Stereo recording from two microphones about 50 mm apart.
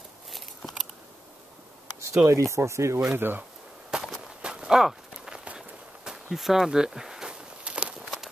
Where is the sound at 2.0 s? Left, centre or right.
Right.